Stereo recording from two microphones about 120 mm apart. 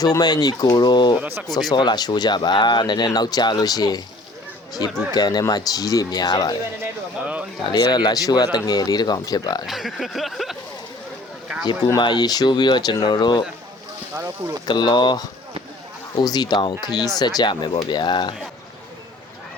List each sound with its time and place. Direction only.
0.0 s speech: 35° left (ahead or behind)
7.2 s speech: 10° right (ahead or behind)
7.7 s speech: 35° left (ahead or behind)
9.6 s speech: centre (ahead or behind)
11.9 s speech: 35° left (ahead or behind)
14.2 s speech: 25° right (ahead or behind)
14.7 s speech: 40° left (ahead or behind)